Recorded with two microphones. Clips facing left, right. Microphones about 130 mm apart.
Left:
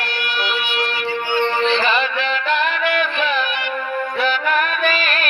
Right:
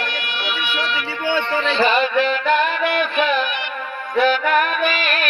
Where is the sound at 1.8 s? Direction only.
45° right (ahead or behind).